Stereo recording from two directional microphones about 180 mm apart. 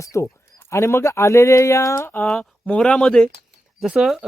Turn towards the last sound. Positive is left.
turn(degrees=-5)  # may be behind; listen again after turning